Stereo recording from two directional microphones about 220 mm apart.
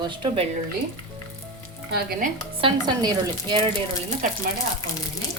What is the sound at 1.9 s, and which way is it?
Speech, 40° right (ahead or behind).